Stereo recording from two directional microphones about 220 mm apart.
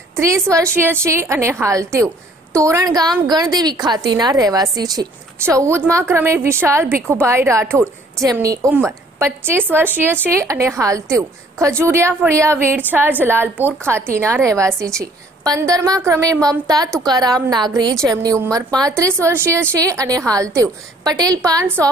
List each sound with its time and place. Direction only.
0.1 s a woman's voice: 15° right (ahead or behind)